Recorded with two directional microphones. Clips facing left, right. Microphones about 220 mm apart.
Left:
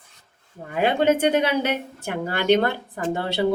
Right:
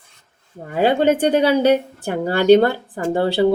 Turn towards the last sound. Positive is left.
turn(degrees=-30)  # may be behind; listen again after turning